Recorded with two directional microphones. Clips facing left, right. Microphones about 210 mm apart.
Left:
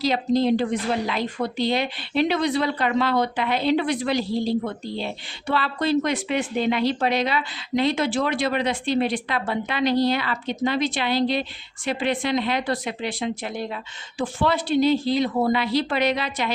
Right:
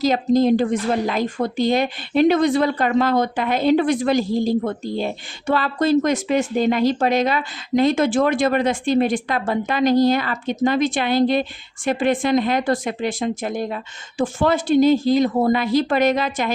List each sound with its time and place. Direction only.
0.0 s a woman's voice: 45° right (ahead or behind)